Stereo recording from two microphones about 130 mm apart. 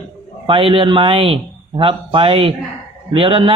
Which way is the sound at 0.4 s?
45° right (ahead or behind).